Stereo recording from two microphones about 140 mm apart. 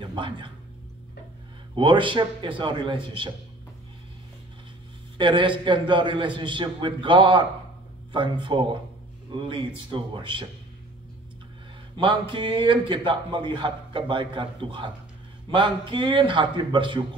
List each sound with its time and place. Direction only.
0.0 s speech: 35° right (ahead or behind)
1.8 s a man's voice: 35° right (ahead or behind)
5.1 s a man's voice: 35° right (ahead or behind)
12.0 s a man's voice: 35° right (ahead or behind)